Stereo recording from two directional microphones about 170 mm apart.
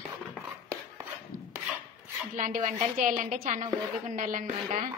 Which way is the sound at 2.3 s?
50° right (ahead or behind).